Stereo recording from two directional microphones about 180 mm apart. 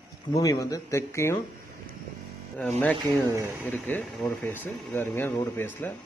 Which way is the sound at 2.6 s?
5° left (ahead or behind).